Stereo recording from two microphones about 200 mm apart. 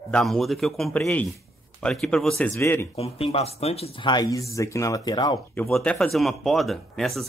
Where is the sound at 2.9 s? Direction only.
30° left (ahead or behind).